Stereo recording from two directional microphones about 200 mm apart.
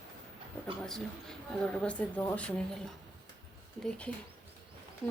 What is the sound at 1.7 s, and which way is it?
Speech, 5° left (ahead or behind).